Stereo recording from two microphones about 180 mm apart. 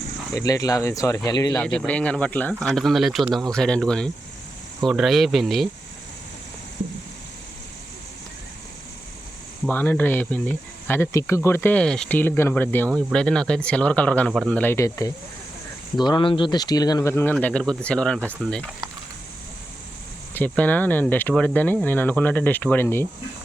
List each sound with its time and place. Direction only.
0.3 s speech: 20° left (ahead or behind)
1.6 s speech: 5° left (ahead or behind)
9.6 s speech: 10° left (ahead or behind)
20.3 s speech: 10° left (ahead or behind)